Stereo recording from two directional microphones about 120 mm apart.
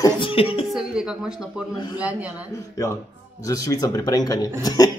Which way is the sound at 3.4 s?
30° left (ahead or behind).